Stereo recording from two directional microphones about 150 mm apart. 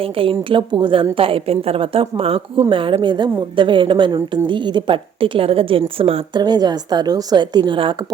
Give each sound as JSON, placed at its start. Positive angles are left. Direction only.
{"t": 0.0, "sound": "a woman's voice", "side_deg": -35}